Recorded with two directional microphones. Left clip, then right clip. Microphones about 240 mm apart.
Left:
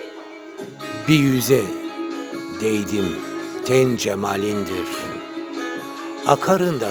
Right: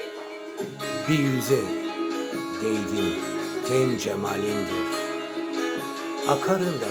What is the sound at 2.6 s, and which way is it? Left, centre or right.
Speech, left.